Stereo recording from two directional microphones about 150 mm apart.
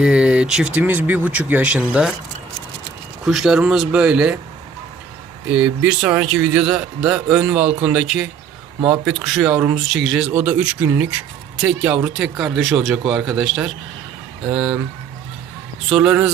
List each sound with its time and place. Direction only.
0.0 s a man's voice: 5° right (ahead or behind)
3.2 s speech: 5° right (ahead or behind)
5.5 s a man's voice: 10° right (ahead or behind)
15.9 s speech: 5° right (ahead or behind)